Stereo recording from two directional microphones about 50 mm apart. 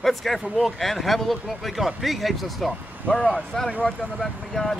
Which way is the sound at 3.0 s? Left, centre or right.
Left.